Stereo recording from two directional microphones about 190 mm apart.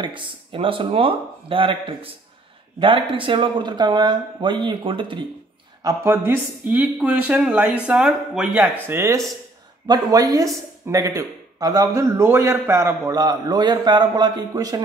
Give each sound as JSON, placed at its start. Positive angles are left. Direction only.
{"t": 0.0, "sound": "a man's voice", "side_deg": -25}
{"t": 5.9, "sound": "speech", "side_deg": -10}
{"t": 8.8, "sound": "a man's voice", "side_deg": -15}